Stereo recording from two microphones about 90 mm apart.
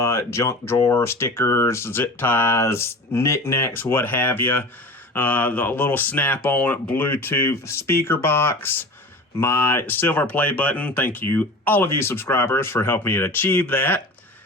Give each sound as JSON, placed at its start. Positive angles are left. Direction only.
{"t": 0.0, "sound": "speech", "side_deg": 35}